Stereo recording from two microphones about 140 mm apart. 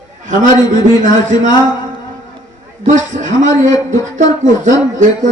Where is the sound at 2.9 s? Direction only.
65° right (ahead or behind).